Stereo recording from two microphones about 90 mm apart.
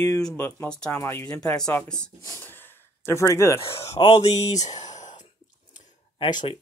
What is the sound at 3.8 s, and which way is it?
Speech, 90° left.